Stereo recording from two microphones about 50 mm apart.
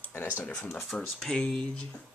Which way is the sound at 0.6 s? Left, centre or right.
Left.